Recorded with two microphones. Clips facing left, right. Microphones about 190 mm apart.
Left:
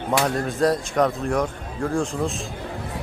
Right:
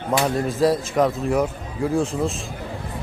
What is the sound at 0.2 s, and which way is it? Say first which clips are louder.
Speech: right 2 dB; centre (ahead or behind).